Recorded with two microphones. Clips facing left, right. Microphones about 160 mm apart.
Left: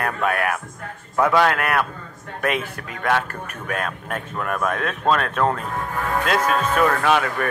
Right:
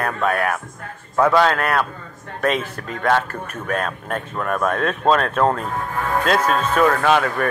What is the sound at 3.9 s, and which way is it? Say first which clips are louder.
Speech: right 3 dB; 35° right (ahead or behind).